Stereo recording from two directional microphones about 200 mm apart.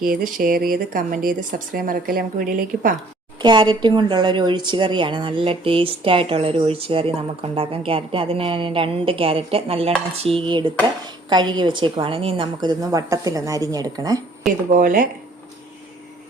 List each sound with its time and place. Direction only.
0.0 s speech: 45° right (ahead or behind)
3.4 s a woman's voice: 20° right (ahead or behind)
14.7 s speech: 40° right (ahead or behind)